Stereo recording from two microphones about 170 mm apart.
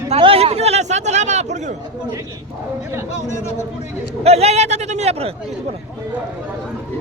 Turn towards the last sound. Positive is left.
turn(degrees=-35)  # may be behind; listen again after turning